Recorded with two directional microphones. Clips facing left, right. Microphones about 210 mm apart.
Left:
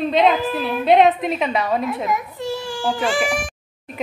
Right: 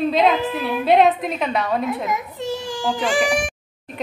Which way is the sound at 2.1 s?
20° right (ahead or behind).